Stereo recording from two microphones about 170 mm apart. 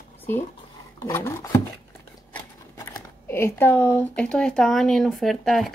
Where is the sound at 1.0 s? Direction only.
15° left (ahead or behind).